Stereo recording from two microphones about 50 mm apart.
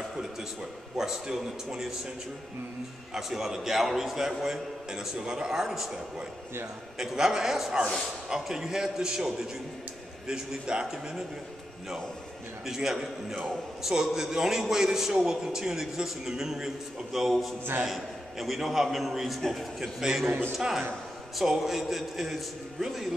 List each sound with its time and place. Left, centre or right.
0.9 s a man's voice: centre
3.2 s a man's voice: centre
7.0 s a man's voice: centre
12.6 s a man's voice: centre
20.2 s a man's voice: right
20.5 s a man's voice: centre